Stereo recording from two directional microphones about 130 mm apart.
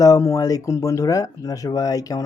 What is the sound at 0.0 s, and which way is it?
Speech, 25° left (ahead or behind).